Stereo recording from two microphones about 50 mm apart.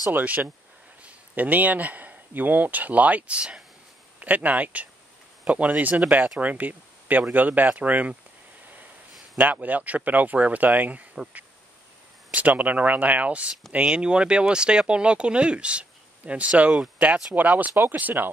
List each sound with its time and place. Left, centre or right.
0.1 s speech: right
4.2 s speech: right
6.1 s speech: centre
6.4 s speech: right
9.4 s speech: right
12.3 s speech: right